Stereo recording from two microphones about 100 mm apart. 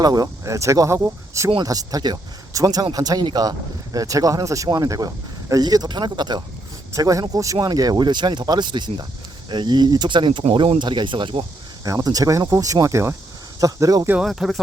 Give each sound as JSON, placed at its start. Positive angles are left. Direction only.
{"t": 0.0, "sound": "speech", "side_deg": -40}
{"t": 6.9, "sound": "speech", "side_deg": -35}
{"t": 11.9, "sound": "speech", "side_deg": -35}
{"t": 14.2, "sound": "speech", "side_deg": -5}